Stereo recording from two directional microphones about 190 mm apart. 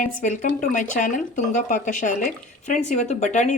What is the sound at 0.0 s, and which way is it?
Speech, 40° left (ahead or behind).